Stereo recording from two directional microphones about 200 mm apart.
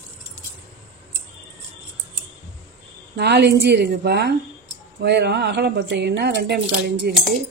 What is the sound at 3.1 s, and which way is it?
A woman's voice, 60° right (ahead or behind).